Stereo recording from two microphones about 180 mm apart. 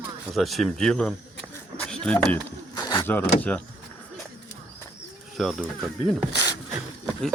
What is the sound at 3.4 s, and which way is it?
Speech, 5° left (ahead or behind).